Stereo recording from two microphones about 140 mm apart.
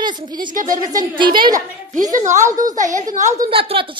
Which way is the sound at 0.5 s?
70° right (ahead or behind).